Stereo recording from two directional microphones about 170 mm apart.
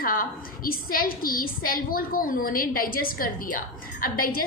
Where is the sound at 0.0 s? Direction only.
55° left (ahead or behind).